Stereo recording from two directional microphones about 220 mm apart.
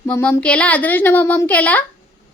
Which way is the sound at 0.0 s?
10° left (ahead or behind).